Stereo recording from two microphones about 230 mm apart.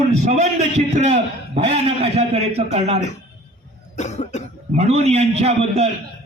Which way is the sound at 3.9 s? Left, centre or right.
Left.